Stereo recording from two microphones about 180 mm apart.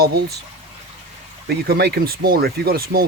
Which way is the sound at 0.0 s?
60° right (ahead or behind).